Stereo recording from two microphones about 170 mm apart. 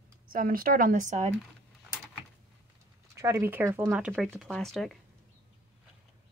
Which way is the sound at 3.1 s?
15° right (ahead or behind).